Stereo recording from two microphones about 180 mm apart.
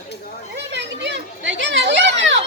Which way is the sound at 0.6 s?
75° right (ahead or behind).